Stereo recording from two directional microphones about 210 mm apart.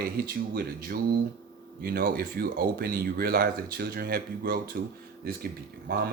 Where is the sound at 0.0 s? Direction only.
45° right (ahead or behind).